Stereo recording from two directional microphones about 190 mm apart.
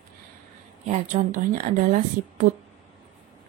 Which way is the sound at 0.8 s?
40° right (ahead or behind).